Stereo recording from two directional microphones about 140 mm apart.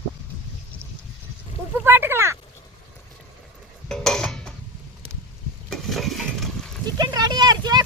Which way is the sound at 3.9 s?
5° left (ahead or behind).